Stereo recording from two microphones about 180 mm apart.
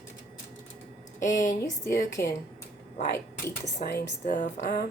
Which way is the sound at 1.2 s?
45° left (ahead or behind).